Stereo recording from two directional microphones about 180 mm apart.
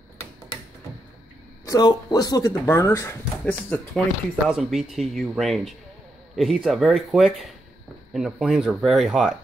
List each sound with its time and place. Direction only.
1.7 s speech: 25° left (ahead or behind)
4.5 s speech: centre (ahead or behind)